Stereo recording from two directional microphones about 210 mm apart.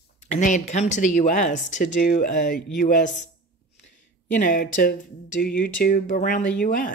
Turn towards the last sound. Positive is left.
turn(degrees=40)  # may be behind; listen again after turning